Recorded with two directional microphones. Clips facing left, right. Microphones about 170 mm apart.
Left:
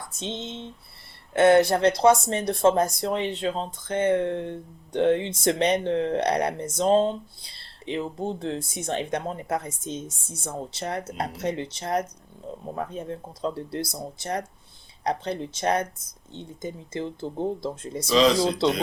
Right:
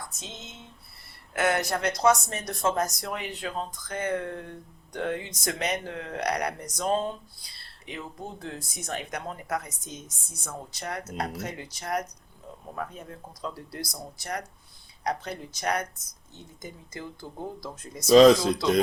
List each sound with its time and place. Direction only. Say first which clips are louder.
0.2 s speech: left 11 dB; 30° left (ahead or behind)